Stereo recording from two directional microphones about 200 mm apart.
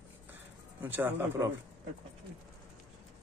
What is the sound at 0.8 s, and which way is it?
Speech, 10° right (ahead or behind).